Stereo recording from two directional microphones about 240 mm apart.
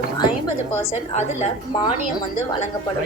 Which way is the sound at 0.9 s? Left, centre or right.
Left.